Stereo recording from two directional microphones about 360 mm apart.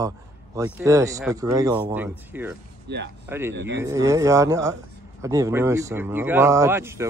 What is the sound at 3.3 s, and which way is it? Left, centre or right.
Speech, centre.